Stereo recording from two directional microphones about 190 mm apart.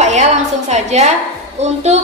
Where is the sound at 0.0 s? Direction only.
40° right (ahead or behind).